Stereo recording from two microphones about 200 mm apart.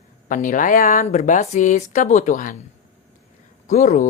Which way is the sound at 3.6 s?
35° left (ahead or behind).